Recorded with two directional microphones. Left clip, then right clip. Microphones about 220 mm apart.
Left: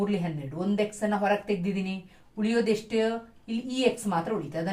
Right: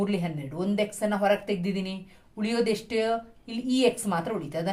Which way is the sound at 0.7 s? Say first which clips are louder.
Right 1 dB; 40° right (ahead or behind).